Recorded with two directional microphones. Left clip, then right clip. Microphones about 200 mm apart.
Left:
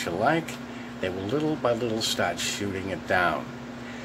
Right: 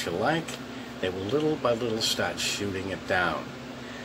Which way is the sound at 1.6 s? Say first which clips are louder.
Left 1 dB; 10° left (ahead or behind).